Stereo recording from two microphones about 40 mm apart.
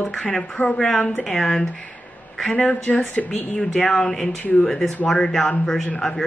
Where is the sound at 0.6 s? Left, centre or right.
Left.